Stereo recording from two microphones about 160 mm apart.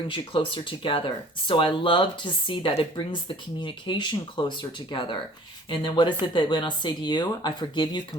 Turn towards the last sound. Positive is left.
turn(degrees=25)  # may be behind; listen again after turning